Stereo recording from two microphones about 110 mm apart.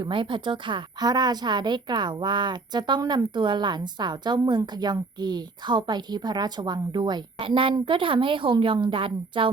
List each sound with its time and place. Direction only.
0.0 s a woman's voice: 50° right (ahead or behind)
3.0 s speech: 30° right (ahead or behind)
3.3 s a woman's voice: 45° right (ahead or behind)